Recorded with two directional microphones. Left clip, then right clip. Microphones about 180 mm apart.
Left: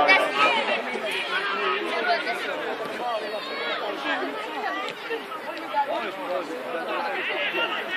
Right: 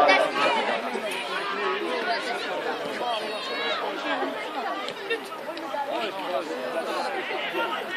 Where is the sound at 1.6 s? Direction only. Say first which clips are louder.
Left 2 dB; 30° left (ahead or behind).